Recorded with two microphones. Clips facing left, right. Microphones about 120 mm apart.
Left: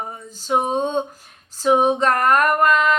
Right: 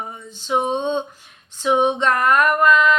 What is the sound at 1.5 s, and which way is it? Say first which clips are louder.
Female singing: left 1 dB; 40° left (ahead or behind).